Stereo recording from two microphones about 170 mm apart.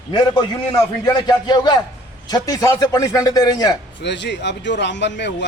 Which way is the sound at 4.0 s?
90° left.